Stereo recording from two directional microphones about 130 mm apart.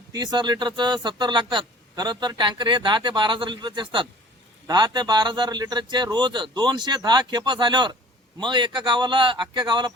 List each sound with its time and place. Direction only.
0.1 s speech: 30° right (ahead or behind)